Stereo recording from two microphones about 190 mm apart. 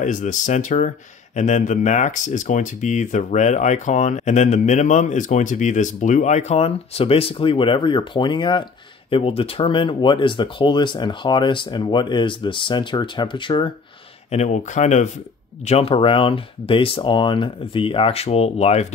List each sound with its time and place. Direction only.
0.0 s speech: 40° left (ahead or behind); by 13.7 s 25° left (ahead or behind)
14.3 s speech: 35° left (ahead or behind)